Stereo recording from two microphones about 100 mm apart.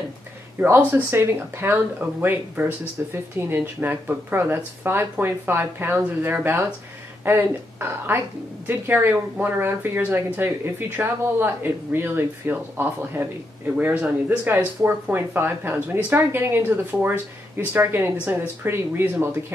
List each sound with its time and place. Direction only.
0.6 s speech: 20° right (ahead or behind)